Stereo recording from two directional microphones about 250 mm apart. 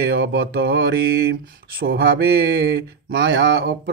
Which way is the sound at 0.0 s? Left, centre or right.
Right.